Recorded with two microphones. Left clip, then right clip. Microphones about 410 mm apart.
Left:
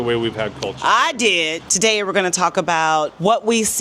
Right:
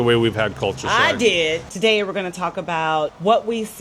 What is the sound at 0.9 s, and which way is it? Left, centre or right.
Speech, left.